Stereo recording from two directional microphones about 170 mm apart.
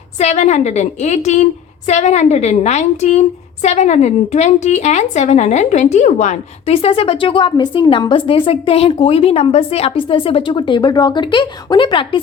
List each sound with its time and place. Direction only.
0.2 s a woman's voice: 40° left (ahead or behind)